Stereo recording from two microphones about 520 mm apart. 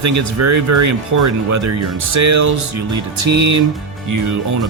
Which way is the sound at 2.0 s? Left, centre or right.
Right.